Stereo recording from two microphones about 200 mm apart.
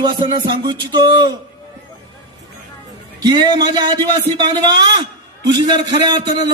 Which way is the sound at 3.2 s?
20° right (ahead or behind).